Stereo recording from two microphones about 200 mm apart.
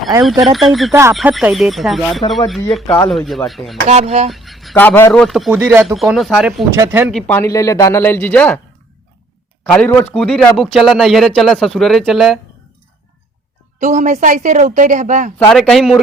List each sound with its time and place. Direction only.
0.2 s a man's voice: centre (ahead or behind)
3.8 s speech: 30° right (ahead or behind)
4.3 s a sound: centre (ahead or behind)
4.7 s speech: 10° left (ahead or behind)
5.5 s speech: 10° right (ahead or behind)
6.0 s a man's voice: centre (ahead or behind)
6.7 s speech: 15° right (ahead or behind)
7.1 s speech: 5° left (ahead or behind)
9.6 s a man's voice: 5° left (ahead or behind)
13.7 s speech: 40° right (ahead or behind)
15.4 s a man's voice: 5° left (ahead or behind)